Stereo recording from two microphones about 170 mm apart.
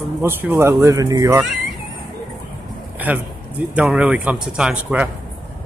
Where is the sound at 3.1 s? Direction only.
10° right (ahead or behind).